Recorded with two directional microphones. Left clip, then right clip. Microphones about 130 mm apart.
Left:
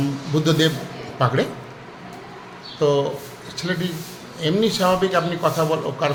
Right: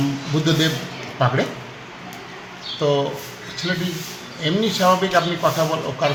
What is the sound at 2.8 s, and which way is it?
Speech, 40° left (ahead or behind).